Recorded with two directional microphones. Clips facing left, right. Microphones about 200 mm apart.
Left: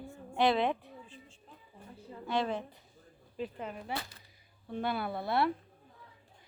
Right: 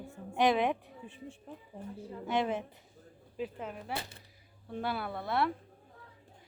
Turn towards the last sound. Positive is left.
turn(degrees=0)  # may be behind; listen again after turning